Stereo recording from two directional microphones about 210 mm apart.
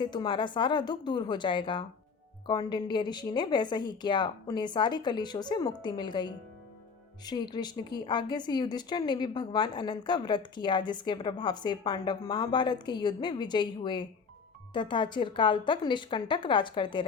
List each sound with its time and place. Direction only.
0.0 s a woman's voice: 20° left (ahead or behind)